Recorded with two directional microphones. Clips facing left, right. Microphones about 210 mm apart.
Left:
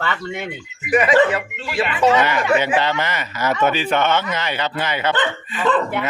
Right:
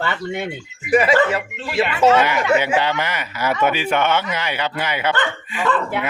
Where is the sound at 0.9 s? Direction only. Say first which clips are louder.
Right 1 dB; 25° right (ahead or behind).